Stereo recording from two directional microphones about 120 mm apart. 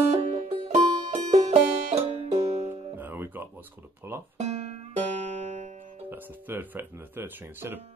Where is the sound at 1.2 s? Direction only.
65° right (ahead or behind).